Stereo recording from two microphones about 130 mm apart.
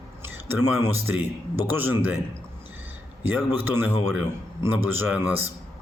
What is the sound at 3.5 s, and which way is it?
A man's voice, 15° right (ahead or behind).